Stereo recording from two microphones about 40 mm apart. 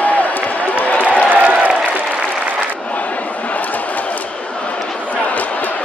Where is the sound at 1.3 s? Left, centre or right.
Right.